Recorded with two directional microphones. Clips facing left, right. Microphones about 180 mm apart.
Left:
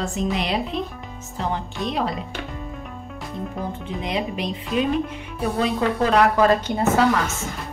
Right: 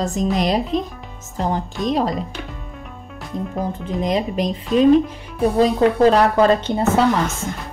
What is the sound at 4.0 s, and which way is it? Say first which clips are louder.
Speech: right 6 dB; 40° right (ahead or behind).